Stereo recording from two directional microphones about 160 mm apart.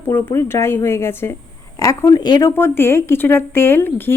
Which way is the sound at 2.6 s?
15° left (ahead or behind).